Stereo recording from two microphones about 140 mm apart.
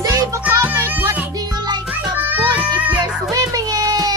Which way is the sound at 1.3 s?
25° right (ahead or behind).